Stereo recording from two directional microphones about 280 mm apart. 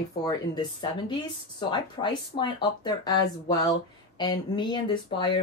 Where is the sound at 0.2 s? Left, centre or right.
Centre.